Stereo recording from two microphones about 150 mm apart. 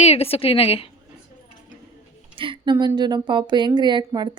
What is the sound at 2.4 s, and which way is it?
Speech, 35° right (ahead or behind).